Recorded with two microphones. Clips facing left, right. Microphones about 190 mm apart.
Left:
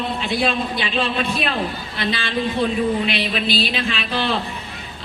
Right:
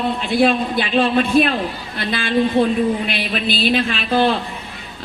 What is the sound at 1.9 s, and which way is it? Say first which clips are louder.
Speech: right 1 dB; 50° right (ahead or behind).